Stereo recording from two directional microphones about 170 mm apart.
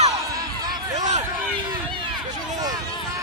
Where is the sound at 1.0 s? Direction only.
40° right (ahead or behind).